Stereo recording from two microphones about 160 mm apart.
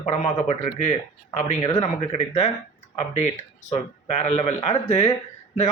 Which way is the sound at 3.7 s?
45° left (ahead or behind).